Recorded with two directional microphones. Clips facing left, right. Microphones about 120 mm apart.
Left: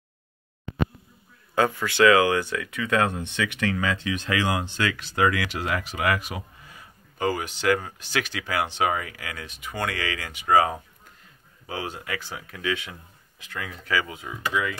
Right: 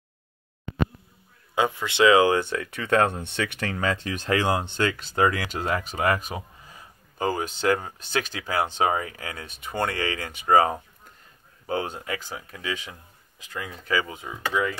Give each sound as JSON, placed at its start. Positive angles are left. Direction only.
{"t": 1.5, "sound": "speech", "side_deg": -20}
{"t": 13.5, "sound": "speech", "side_deg": -20}